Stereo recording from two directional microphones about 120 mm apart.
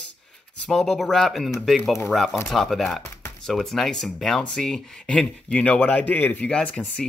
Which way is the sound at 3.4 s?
Centre (ahead or behind).